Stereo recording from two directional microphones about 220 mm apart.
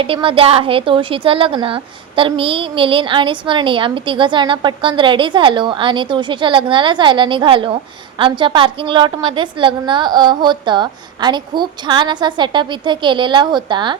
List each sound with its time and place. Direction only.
0.0 s a woman's voice: 25° right (ahead or behind)